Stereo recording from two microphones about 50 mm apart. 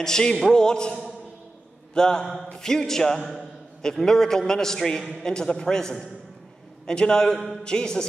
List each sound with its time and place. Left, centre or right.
0.0 s a man's voice: centre
2.2 s a man's voice: centre
2.5 s a man's voice: centre